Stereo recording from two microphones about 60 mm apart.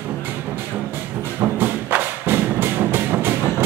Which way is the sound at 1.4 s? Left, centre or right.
Right.